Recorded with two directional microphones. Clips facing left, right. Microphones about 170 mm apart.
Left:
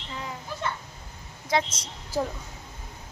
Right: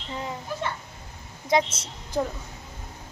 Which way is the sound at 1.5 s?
25° right (ahead or behind).